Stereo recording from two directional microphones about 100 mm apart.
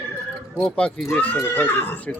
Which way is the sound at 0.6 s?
10° left (ahead or behind).